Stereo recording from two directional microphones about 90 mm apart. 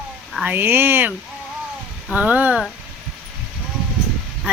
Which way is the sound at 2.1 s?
15° right (ahead or behind).